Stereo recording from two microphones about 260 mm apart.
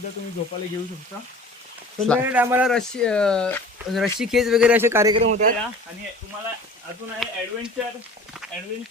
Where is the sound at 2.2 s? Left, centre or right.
Centre.